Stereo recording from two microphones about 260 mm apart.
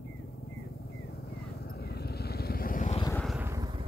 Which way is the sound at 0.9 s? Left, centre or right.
Left.